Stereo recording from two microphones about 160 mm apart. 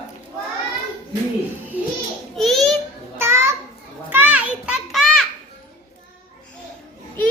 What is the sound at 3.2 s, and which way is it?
Children playing, 15° right (ahead or behind).